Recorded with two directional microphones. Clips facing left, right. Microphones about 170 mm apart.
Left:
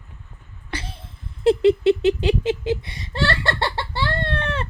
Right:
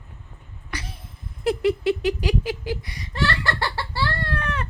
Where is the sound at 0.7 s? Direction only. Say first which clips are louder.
Left 3 dB; 30° left (ahead or behind).